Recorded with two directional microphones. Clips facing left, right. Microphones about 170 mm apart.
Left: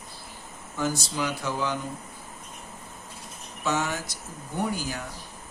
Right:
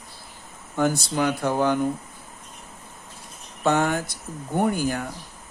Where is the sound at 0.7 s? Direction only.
60° right (ahead or behind).